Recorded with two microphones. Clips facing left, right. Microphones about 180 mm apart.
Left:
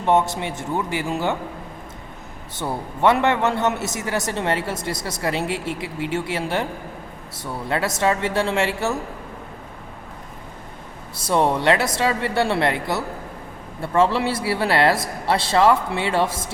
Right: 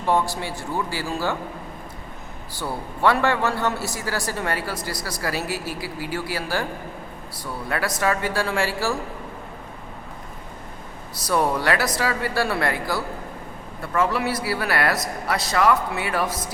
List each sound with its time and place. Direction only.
0.0 s a man's voice: 20° left (ahead or behind)
2.6 s a man's voice: 20° left (ahead or behind)
11.2 s a man's voice: 25° left (ahead or behind)